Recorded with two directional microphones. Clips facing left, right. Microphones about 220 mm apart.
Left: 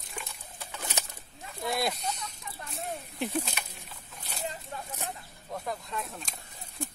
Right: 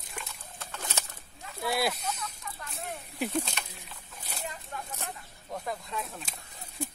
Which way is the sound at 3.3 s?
10° left (ahead or behind).